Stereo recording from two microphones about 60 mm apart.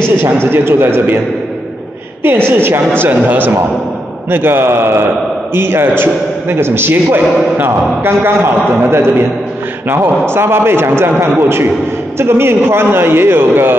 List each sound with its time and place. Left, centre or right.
0.2 s a man's voice: right
2.2 s a man's voice: right